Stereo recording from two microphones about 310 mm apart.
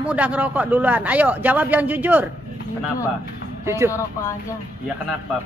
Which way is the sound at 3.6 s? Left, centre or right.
Centre.